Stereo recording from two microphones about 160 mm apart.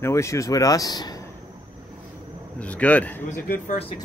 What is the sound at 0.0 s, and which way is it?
Speech, 20° left (ahead or behind).